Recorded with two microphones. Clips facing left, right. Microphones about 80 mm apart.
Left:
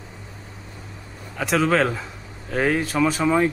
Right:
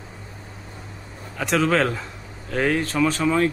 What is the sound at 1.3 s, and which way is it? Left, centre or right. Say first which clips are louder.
A man's voice: even; centre.